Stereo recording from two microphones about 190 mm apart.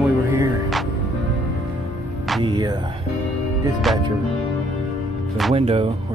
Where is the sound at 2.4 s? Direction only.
25° right (ahead or behind).